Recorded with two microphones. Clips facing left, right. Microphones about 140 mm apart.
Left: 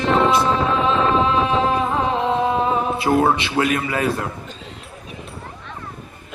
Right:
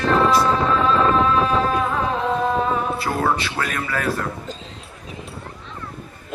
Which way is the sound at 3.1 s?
25° left (ahead or behind).